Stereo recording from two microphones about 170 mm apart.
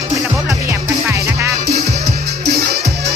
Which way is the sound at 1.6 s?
65° right (ahead or behind).